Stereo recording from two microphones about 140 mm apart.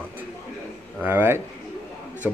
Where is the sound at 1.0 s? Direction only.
15° right (ahead or behind).